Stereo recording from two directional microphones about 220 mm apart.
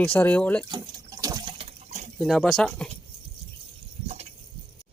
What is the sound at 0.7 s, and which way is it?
Water, 15° right (ahead or behind).